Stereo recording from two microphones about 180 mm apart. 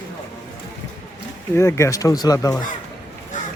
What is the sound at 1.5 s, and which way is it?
Speech, 15° left (ahead or behind).